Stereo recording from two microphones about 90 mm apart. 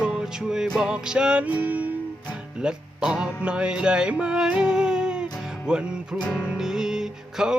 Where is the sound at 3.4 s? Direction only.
10° right (ahead or behind).